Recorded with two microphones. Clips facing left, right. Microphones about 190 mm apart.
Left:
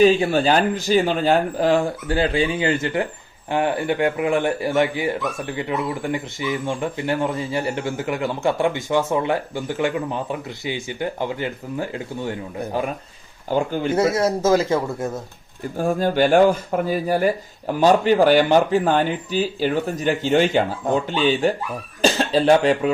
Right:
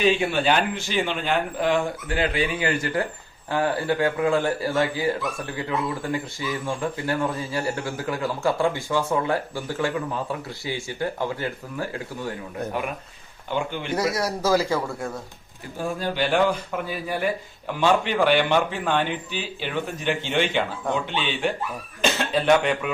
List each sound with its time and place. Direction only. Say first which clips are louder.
0.0 s speech: left 6 dB; 40° left (ahead or behind); by 12.7 s 15° left (ahead or behind)
13.5 s speech: left 6 dB; 40° left (ahead or behind)
13.9 s speech: left 5 dB; 25° left (ahead or behind)
15.8 s speech: left 7 dB; 45° left (ahead or behind)